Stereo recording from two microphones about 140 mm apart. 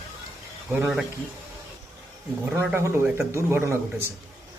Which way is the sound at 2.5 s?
15° right (ahead or behind).